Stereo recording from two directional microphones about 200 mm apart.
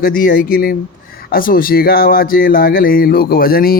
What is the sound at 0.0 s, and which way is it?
Speech, 45° left (ahead or behind).